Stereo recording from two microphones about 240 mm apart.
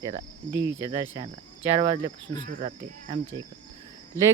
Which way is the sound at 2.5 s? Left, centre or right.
Right.